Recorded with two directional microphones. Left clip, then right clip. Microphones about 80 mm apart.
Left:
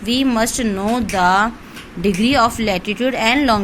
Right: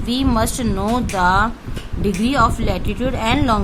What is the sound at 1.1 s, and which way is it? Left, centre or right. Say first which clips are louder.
Speech: left 2 dB; left.